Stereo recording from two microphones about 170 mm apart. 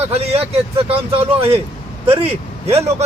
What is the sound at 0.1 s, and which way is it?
Speech, 35° right (ahead or behind).